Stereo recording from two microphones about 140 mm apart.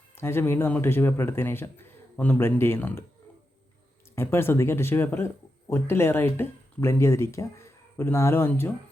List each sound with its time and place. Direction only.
0.2 s speech: 15° left (ahead or behind)
4.1 s speech: 15° left (ahead or behind)